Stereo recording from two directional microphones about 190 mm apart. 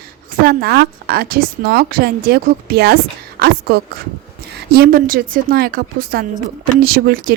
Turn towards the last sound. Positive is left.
turn(degrees=-50)  # may be behind; listen again after turning